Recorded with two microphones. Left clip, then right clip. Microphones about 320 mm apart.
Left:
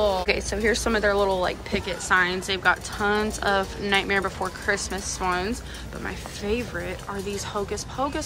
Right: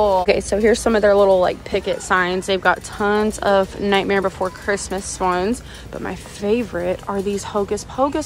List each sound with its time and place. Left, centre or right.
0.0 s a woman's voice: centre